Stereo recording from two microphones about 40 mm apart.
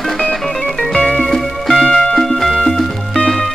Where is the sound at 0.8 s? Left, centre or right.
Centre.